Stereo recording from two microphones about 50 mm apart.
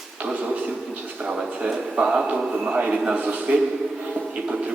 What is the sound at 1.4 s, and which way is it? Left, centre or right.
A man's voice, centre.